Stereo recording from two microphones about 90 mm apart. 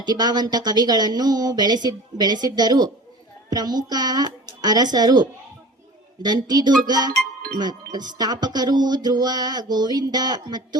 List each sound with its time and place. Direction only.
0.0 s music: 50° right (ahead or behind)